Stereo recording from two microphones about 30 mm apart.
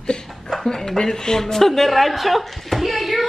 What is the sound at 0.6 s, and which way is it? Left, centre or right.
A woman's voice, centre.